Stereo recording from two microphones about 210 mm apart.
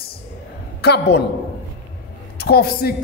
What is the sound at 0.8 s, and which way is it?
Speech, 50° left (ahead or behind).